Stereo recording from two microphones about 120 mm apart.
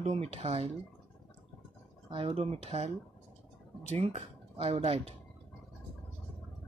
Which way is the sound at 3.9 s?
60° right (ahead or behind).